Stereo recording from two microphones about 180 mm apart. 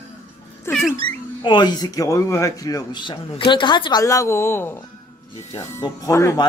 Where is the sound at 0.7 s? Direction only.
15° left (ahead or behind).